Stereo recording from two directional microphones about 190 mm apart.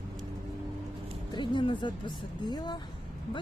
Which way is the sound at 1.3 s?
25° left (ahead or behind).